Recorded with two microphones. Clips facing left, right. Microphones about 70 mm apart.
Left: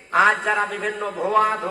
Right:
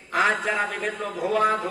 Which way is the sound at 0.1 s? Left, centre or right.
Left.